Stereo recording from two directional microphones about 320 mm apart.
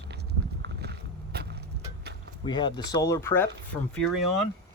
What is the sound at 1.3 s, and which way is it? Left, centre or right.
Vehicle, right.